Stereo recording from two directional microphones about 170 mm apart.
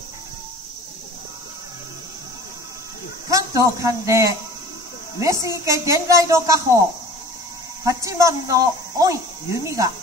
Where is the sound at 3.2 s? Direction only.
20° right (ahead or behind).